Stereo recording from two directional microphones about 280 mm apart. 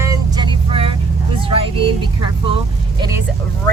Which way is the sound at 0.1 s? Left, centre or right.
Centre.